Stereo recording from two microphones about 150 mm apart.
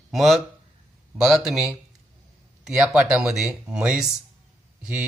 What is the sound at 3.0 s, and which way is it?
A man's voice, 5° right (ahead or behind).